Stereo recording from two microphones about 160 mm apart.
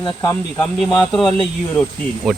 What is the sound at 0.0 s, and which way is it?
Speech, 25° left (ahead or behind).